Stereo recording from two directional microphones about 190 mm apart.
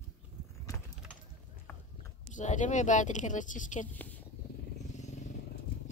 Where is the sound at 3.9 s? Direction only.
10° left (ahead or behind).